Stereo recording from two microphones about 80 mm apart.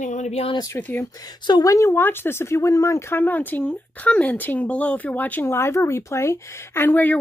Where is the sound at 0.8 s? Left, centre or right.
Left.